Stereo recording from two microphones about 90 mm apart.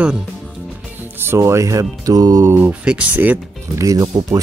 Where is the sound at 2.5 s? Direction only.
25° right (ahead or behind).